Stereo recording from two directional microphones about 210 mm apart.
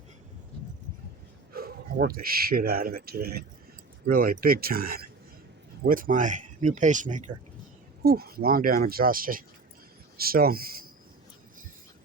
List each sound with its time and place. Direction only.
1.5 s speech: 45° right (ahead or behind)